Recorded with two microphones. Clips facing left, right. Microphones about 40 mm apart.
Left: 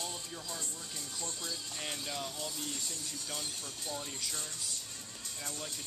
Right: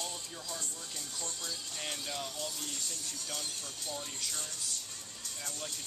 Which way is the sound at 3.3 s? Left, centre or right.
Centre.